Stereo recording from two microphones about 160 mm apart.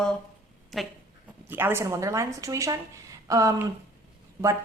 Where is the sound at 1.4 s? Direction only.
15° right (ahead or behind).